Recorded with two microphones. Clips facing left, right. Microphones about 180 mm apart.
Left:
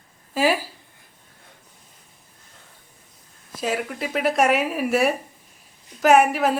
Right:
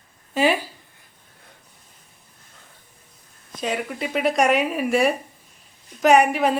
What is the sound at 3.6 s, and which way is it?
Speech, centre (ahead or behind).